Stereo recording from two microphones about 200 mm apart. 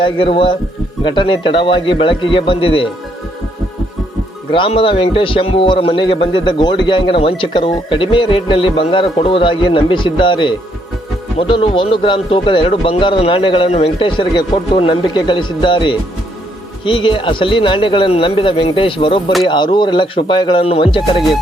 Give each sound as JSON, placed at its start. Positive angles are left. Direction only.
{"t": 0.0, "sound": "speech", "side_deg": 25}
{"t": 4.5, "sound": "speech", "side_deg": 25}